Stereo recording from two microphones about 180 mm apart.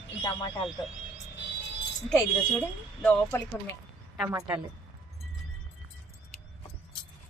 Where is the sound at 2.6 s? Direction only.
10° left (ahead or behind).